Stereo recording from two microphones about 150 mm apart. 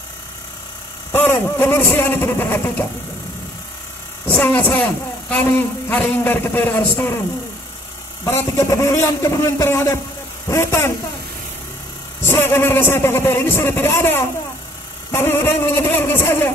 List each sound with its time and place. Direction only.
1.1 s a man's voice: 15° left (ahead or behind)
4.3 s a man's voice: 10° left (ahead or behind)
8.3 s a man's voice: 20° left (ahead or behind)
12.2 s a man's voice: 15° left (ahead or behind)